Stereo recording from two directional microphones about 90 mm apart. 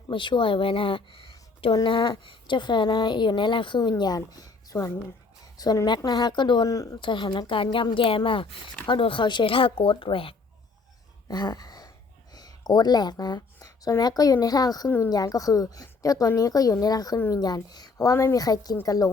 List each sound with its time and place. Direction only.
0.1 s speech: 65° left (ahead or behind)
1.7 s a woman's voice: 55° left (ahead or behind)
6.7 s a woman's voice: 40° left (ahead or behind)
7.0 s a woman's voice: 65° left (ahead or behind); by 10.3 s 85° left
11.3 s a sound: 50° left (ahead or behind)
12.3 s a woman's voice: 45° left (ahead or behind)
14.8 s speech: 25° left (ahead or behind)
15.1 s a woman's voice: 45° left (ahead or behind)
18.3 s a woman's voice: 45° left (ahead or behind)